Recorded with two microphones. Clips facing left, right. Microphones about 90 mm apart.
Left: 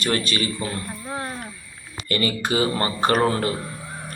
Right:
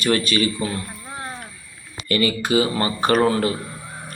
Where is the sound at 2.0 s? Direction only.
30° left (ahead or behind).